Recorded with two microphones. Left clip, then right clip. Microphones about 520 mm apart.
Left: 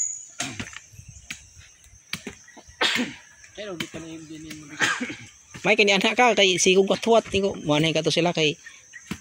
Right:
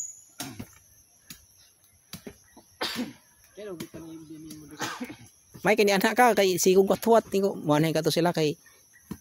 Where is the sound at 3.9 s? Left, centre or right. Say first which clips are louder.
Left 6 dB; centre.